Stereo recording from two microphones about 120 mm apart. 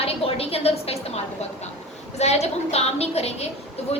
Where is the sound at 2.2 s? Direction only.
65° left (ahead or behind).